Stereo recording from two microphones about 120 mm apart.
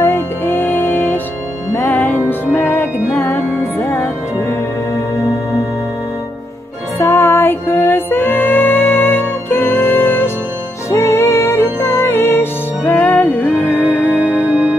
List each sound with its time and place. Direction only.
0.0 s music: 15° left (ahead or behind)
7.0 s music: 20° left (ahead or behind)
14.3 s music: 10° right (ahead or behind)